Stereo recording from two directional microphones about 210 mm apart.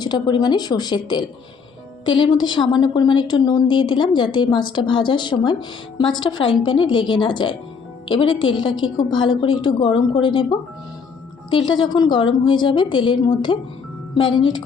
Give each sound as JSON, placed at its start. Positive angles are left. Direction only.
{"t": 0.0, "sound": "a woman's voice", "side_deg": 20}
{"t": 11.7, "sound": "a woman's voice", "side_deg": 20}